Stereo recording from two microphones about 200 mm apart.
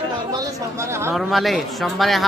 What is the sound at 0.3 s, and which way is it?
Chatter, 15° right (ahead or behind).